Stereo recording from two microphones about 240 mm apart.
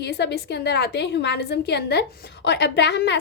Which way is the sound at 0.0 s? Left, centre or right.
Left.